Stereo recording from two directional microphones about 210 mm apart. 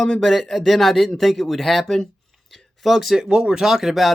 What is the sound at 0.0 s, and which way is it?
Speech, centre (ahead or behind).